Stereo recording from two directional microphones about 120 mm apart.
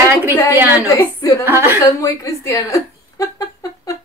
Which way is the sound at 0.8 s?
25° left (ahead or behind).